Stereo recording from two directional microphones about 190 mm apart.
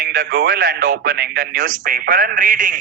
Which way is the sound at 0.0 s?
55° right (ahead or behind).